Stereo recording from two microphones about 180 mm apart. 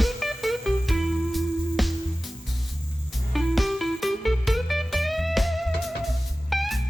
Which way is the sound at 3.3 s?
Centre (ahead or behind).